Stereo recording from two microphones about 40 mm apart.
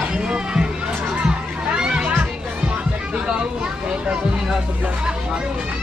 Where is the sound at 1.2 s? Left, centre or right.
Right.